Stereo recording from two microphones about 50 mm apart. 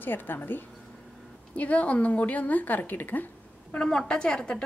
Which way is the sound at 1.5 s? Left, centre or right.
Left.